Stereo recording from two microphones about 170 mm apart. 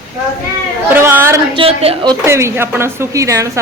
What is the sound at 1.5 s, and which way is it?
Speech, 35° right (ahead or behind).